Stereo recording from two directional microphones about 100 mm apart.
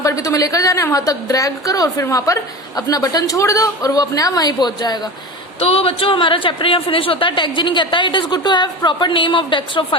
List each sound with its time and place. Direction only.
0.0 s a woman's voice: 35° left (ahead or behind)
5.5 s a woman's voice: 80° left; by 9.8 s 55° left (ahead or behind)